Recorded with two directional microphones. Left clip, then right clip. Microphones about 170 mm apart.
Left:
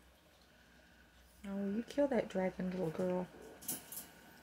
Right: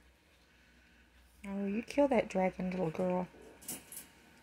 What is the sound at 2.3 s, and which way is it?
Speech, 30° right (ahead or behind).